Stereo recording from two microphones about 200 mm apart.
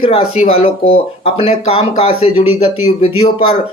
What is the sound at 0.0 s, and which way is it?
Speech, 30° left (ahead or behind).